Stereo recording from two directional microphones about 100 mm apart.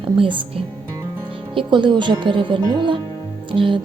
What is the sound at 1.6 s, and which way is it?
Speech, 55° right (ahead or behind).